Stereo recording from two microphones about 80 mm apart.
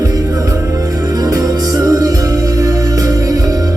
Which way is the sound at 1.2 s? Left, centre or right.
Right.